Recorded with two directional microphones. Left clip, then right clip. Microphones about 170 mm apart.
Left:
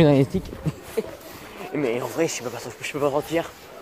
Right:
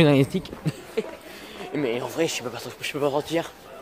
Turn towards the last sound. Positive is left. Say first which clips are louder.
# left 1 dB
turn(degrees=-5)  # may be behind; listen again after turning